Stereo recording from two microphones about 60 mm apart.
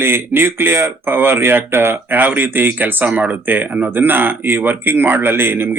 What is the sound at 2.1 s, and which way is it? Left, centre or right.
A man's voice, right.